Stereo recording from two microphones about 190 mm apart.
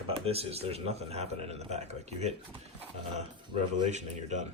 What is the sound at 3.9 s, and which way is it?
Speech, 40° right (ahead or behind).